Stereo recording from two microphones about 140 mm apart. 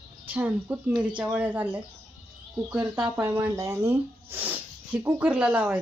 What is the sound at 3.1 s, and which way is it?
Speech, 15° right (ahead or behind).